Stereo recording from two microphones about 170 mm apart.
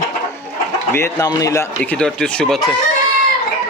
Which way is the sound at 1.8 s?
5° left (ahead or behind).